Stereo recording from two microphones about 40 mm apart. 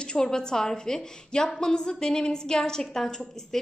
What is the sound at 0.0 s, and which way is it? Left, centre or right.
A woman's voice, centre.